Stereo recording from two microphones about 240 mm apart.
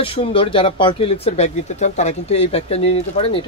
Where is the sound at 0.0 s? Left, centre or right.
Left.